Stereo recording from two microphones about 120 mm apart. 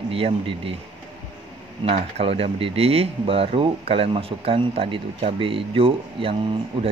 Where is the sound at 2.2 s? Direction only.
55° right (ahead or behind).